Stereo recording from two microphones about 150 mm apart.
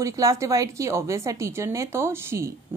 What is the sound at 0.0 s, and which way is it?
A woman's voice, 20° right (ahead or behind).